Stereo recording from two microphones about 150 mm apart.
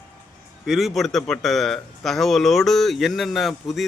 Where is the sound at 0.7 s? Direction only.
Centre (ahead or behind).